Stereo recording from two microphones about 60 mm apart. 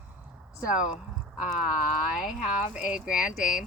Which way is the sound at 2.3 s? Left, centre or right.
Centre.